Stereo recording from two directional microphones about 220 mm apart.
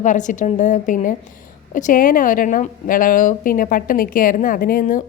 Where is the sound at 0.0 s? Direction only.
35° left (ahead or behind).